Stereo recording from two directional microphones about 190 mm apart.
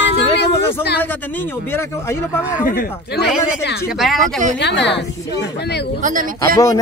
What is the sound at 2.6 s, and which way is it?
Speech, 50° left (ahead or behind).